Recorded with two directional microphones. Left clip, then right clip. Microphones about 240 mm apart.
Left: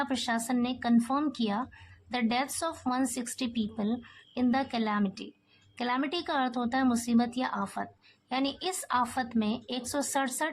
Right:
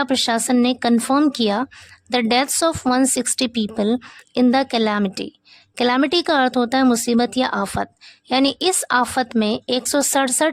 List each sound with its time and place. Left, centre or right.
0.0 s speech: right